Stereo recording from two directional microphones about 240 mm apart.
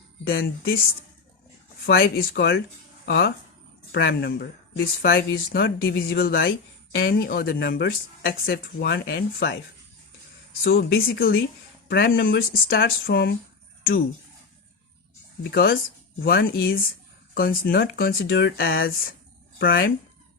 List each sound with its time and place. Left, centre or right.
0.3 s speech: left
1.9 s speech: left
10.6 s speech: left
15.4 s speech: left